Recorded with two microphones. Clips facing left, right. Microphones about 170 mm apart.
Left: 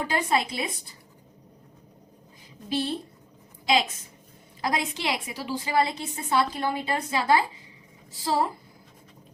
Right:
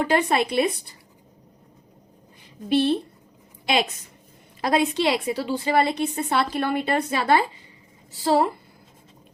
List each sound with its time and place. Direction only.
0.0 s a woman's voice: 60° right (ahead or behind)
2.6 s a woman's voice: 65° right (ahead or behind)
4.6 s a woman's voice: 65° right (ahead or behind)